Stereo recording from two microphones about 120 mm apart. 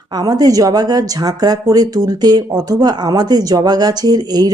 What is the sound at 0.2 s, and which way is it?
Speech, 35° right (ahead or behind).